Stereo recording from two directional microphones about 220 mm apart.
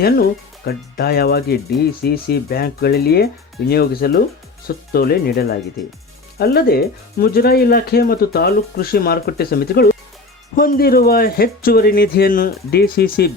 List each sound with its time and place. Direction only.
0.0 s speech: 45° left (ahead or behind)